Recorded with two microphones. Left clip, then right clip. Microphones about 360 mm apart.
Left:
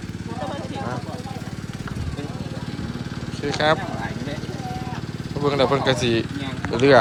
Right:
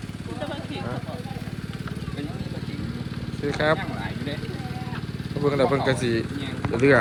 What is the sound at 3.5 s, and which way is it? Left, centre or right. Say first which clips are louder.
Speech: left 3 dB; centre.